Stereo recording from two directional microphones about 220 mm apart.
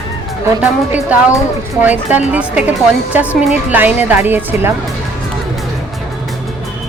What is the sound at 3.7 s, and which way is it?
Speech, 10° right (ahead or behind).